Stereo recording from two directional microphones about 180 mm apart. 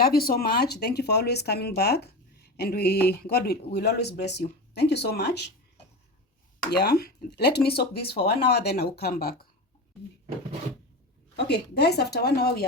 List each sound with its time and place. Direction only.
0.0 s speech: 55° left (ahead or behind)
6.7 s speech: 65° left (ahead or behind)
11.3 s speech: 65° left (ahead or behind)